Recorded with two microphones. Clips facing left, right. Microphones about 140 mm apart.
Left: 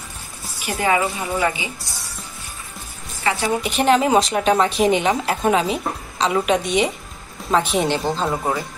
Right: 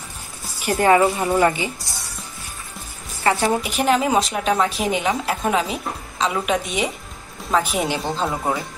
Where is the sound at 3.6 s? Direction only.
5° right (ahead or behind).